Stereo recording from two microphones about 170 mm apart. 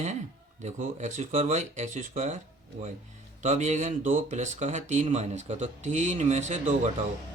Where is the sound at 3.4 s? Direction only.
45° right (ahead or behind).